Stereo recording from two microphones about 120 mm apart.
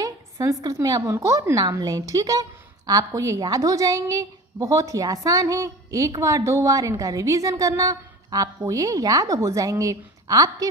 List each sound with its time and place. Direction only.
0.0 s a woman's voice: 30° right (ahead or behind)